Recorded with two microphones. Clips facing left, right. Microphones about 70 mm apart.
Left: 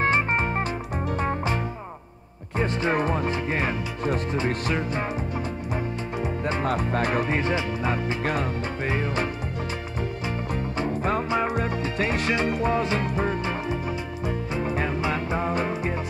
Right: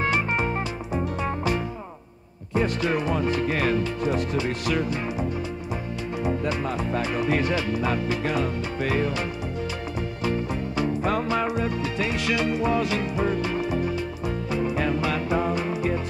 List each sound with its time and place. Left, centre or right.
0.0 s music: left
2.5 s music: left
3.0 s speech: left
3.3 s speech: left
4.0 s speech: left
6.6 s speech: left
7.2 s speech: left
8.2 s speech: left
8.8 s speech: left
10.8 s music: left
11.4 s music: left
12.7 s speech: left
13.2 s music: left
14.9 s music: left